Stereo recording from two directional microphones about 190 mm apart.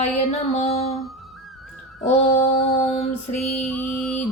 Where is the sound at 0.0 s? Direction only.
35° left (ahead or behind).